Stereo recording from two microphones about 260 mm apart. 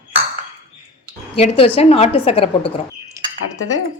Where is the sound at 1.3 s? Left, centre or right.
Left.